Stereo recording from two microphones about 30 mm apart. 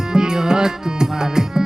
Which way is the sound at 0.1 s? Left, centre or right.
Right.